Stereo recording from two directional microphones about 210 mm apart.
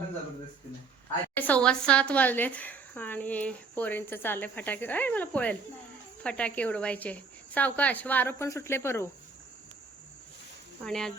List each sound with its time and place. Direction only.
1.4 s speech: 5° left (ahead or behind)
10.8 s speech: 5° left (ahead or behind)